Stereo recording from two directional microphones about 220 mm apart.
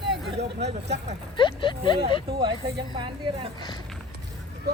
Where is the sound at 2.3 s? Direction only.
20° right (ahead or behind).